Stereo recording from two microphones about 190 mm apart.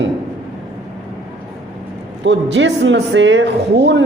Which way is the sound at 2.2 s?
70° right (ahead or behind).